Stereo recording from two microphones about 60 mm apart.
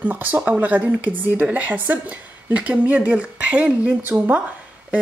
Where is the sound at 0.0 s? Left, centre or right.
Right.